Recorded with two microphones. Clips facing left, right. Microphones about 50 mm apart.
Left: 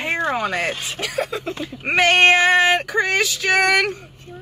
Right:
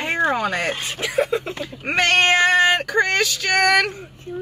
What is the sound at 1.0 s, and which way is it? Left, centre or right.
Speech, right.